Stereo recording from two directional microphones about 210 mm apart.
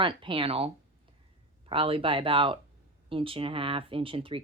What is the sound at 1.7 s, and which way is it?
Speech, 25° right (ahead or behind).